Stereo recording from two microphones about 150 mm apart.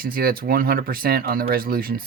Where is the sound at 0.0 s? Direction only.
80° right.